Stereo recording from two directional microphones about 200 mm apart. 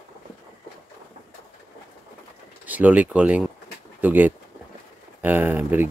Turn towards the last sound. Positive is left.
turn(degrees=-10)  # may be behind; listen again after turning